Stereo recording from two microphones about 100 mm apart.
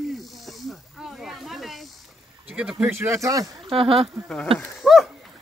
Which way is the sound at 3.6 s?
65° right (ahead or behind).